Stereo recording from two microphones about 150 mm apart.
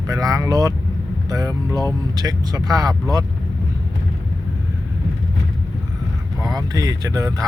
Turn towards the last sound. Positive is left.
turn(degrees=-20)  # may be behind; listen again after turning